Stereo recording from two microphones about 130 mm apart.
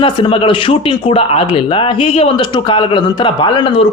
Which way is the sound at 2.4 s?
40° left (ahead or behind).